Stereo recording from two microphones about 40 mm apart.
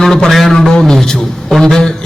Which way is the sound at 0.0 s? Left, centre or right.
Centre.